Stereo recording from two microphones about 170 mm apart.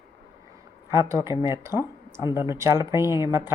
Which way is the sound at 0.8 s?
15° right (ahead or behind).